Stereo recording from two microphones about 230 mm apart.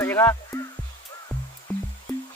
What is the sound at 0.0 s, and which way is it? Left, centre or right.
Music, centre.